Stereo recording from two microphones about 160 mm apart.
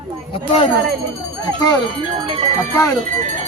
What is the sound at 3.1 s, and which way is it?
Speech, 50° right (ahead or behind).